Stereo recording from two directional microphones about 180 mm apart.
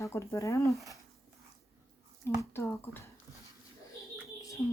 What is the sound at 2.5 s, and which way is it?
Speech, 10° left (ahead or behind).